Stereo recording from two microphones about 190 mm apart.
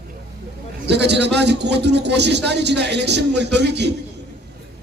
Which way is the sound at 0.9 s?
65° right (ahead or behind).